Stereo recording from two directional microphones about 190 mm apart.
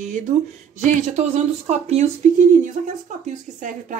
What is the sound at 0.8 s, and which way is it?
A woman's voice, 35° right (ahead or behind).